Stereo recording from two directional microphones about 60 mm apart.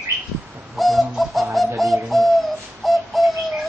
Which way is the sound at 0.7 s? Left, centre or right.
Centre.